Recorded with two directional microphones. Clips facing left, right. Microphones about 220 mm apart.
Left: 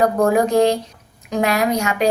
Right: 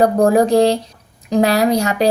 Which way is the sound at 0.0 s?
35° right (ahead or behind).